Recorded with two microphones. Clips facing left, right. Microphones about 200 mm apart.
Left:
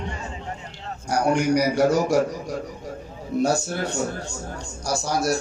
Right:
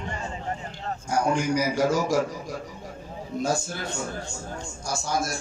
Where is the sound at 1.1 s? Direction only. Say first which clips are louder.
Left 4 dB; 70° left (ahead or behind).